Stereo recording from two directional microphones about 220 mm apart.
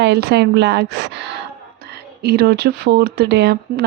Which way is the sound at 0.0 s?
50° right (ahead or behind).